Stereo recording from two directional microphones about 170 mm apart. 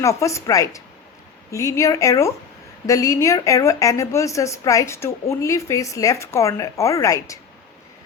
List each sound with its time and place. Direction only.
0.0 s a woman's voice: 15° left (ahead or behind)